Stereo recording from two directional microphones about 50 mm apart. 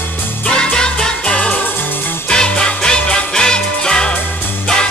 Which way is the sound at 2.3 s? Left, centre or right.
Centre.